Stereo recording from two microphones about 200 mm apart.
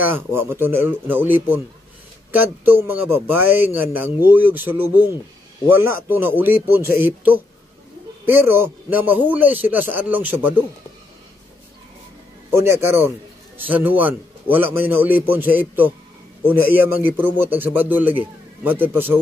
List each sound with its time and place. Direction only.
0.0 s a man's voice: 10° right (ahead or behind)
12.6 s a man's voice: 10° right (ahead or behind)